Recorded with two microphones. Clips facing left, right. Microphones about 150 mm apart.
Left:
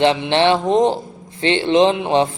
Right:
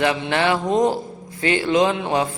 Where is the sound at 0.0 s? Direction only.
25° left (ahead or behind).